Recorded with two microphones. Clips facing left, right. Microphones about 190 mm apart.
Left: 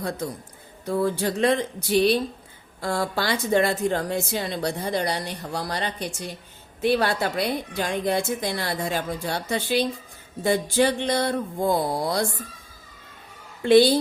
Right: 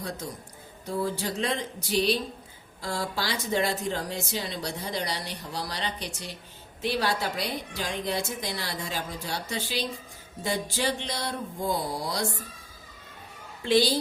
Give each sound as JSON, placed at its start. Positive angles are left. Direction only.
{"t": 0.9, "sound": "a woman's voice", "side_deg": 55}
{"t": 13.7, "sound": "a woman's voice", "side_deg": 55}